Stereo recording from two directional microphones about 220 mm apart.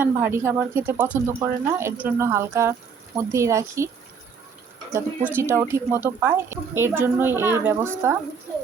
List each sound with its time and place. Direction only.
0.0 s speech: 10° right (ahead or behind)
4.9 s speech: 10° right (ahead or behind)